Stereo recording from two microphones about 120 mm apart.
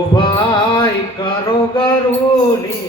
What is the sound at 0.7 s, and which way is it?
Mantra, 40° left (ahead or behind).